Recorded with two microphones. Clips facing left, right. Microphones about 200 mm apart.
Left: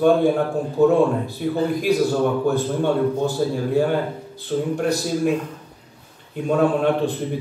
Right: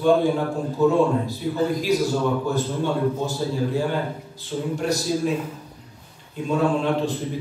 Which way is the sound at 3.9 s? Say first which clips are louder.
Left 4 dB; 60° left (ahead or behind).